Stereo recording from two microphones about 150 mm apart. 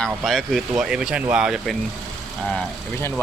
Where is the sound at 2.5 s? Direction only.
15° left (ahead or behind).